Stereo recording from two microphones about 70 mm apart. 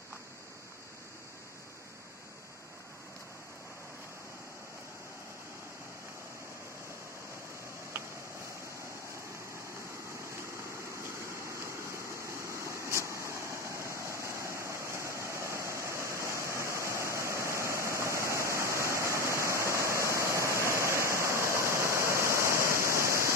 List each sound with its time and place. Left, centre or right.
11.9 s waterfall: right